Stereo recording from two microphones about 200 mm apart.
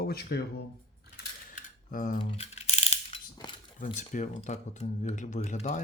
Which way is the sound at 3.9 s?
35° left (ahead or behind).